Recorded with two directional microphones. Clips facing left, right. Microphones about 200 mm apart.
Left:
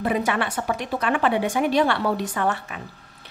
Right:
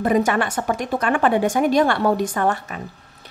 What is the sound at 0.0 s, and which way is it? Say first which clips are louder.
Speech: right 5 dB; 45° right (ahead or behind).